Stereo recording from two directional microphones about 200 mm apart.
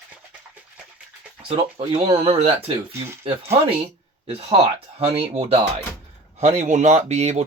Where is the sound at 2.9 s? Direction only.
10° right (ahead or behind).